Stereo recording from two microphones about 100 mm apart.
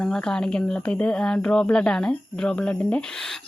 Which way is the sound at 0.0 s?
5° left (ahead or behind).